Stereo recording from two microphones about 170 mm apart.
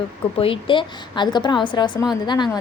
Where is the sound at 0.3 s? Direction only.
35° left (ahead or behind).